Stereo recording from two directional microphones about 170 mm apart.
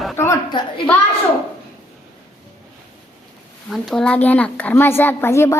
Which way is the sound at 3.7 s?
Centre (ahead or behind).